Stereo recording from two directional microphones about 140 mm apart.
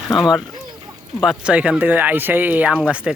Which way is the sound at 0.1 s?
Centre (ahead or behind).